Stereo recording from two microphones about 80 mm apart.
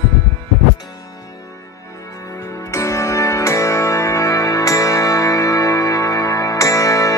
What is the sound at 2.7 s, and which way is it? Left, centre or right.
Music, left.